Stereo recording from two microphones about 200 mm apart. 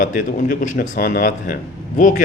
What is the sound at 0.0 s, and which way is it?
A man's voice, 45° left (ahead or behind).